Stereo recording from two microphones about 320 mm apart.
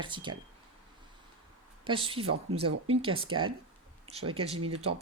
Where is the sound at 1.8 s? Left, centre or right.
Centre.